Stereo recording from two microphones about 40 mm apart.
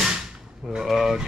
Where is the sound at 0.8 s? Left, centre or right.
Centre.